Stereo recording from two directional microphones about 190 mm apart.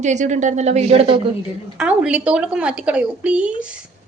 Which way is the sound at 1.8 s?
5° right (ahead or behind).